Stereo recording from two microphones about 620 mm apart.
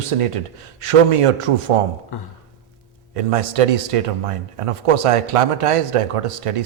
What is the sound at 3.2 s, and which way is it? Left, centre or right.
A man's voice, right.